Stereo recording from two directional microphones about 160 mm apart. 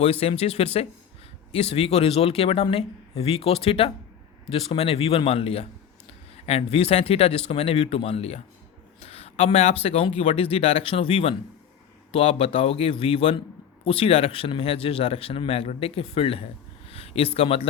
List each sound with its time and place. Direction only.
0.0 s speech: 40° left (ahead or behind)
9.0 s a sound: 40° left (ahead or behind)
9.8 s speech: 35° left (ahead or behind)